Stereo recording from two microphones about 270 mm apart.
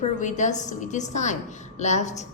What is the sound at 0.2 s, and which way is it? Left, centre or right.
A woman's voice, left.